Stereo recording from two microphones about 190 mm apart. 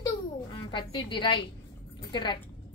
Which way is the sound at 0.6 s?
25° left (ahead or behind).